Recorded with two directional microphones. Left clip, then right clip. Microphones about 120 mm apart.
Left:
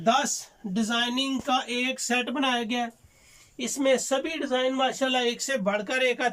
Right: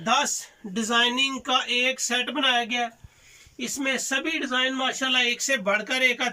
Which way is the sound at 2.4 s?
30° left (ahead or behind).